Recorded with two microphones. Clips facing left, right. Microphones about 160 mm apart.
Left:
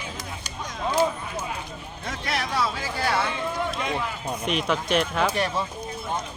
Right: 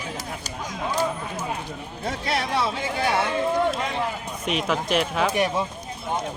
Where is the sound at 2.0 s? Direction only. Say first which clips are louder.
Right 3 dB; 30° right (ahead or behind).